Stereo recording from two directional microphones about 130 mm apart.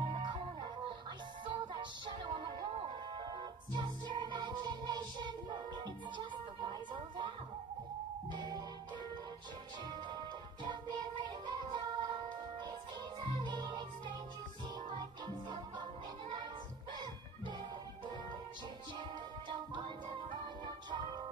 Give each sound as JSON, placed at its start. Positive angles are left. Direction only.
{"t": 0.1, "sound": "music", "side_deg": -35}
{"t": 9.8, "sound": "music", "side_deg": -35}
{"t": 13.4, "sound": "music", "side_deg": -35}
{"t": 15.8, "sound": "music", "side_deg": -35}
{"t": 19.7, "sound": "music", "side_deg": -35}